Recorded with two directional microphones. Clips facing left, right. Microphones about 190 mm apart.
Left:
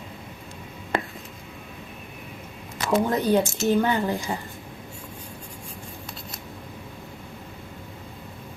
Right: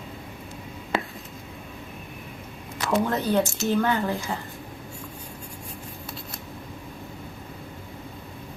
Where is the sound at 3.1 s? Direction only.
15° left (ahead or behind).